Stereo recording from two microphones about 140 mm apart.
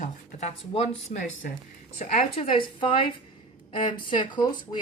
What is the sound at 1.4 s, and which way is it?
Speech, 90° left.